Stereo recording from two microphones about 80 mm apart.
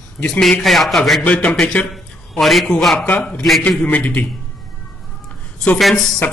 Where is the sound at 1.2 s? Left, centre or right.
Centre.